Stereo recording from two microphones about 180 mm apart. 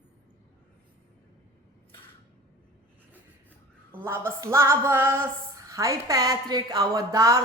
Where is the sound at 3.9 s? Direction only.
10° right (ahead or behind).